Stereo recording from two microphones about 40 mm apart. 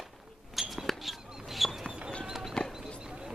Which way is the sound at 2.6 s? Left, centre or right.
Left.